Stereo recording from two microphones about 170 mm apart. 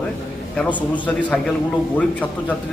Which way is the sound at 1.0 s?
5° left (ahead or behind).